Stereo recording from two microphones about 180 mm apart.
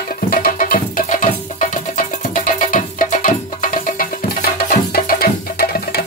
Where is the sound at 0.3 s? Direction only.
50° left (ahead or behind).